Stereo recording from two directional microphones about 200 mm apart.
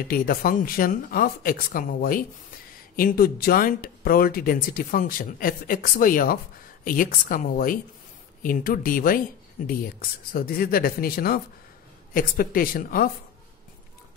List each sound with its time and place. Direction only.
0.1 s speech: 45° left (ahead or behind)